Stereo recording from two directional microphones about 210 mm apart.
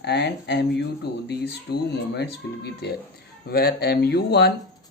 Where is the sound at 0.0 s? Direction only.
55° left (ahead or behind).